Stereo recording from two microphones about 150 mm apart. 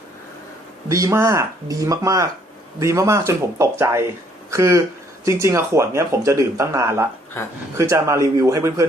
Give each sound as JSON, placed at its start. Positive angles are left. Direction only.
{"t": 0.9, "sound": "speech", "side_deg": -20}